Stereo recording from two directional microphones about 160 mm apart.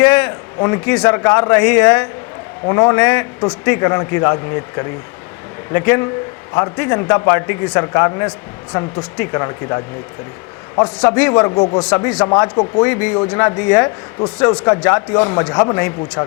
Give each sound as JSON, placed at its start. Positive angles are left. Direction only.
{"t": 0.0, "sound": "a man's voice", "side_deg": 10}
{"t": 11.0, "sound": "a man's voice", "side_deg": 10}
{"t": 11.8, "sound": "a man's voice", "side_deg": 10}